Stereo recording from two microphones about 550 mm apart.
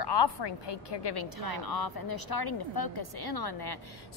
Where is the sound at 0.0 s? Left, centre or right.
Left.